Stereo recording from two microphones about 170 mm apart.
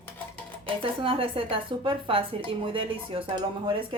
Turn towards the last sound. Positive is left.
turn(degrees=-30)  # may be behind; listen again after turning